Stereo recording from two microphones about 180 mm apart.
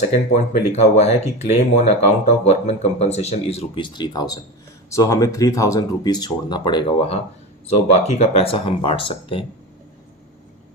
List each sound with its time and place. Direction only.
0.3 s speech: 40° left (ahead or behind)